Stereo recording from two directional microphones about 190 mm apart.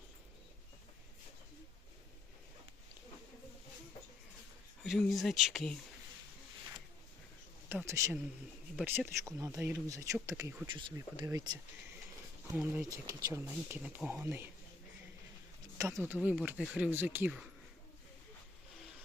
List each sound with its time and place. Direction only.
4.8 s speech: centre (ahead or behind)
7.7 s speech: 10° right (ahead or behind)
12.5 s speech: 5° right (ahead or behind)
12.9 s speech: 15° right (ahead or behind)
15.8 s speech: 15° right (ahead or behind)